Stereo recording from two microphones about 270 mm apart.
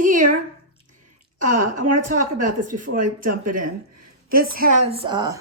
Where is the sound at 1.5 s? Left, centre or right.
Right.